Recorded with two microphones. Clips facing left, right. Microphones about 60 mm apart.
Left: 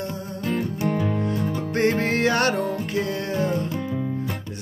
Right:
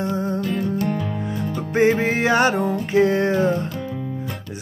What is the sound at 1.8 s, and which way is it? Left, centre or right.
Music, centre.